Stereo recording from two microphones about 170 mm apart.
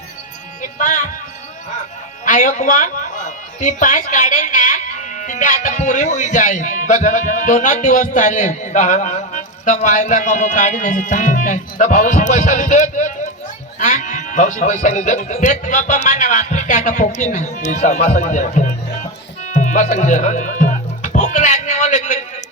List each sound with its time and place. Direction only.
0.6 s speech: 50° left (ahead or behind)
2.2 s speech: 50° left (ahead or behind)
19.5 s music: 45° left (ahead or behind)